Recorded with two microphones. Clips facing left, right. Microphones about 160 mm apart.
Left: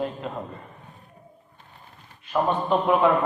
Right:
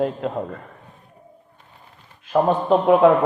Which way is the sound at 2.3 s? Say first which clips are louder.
Right 5 dB; 40° right (ahead or behind).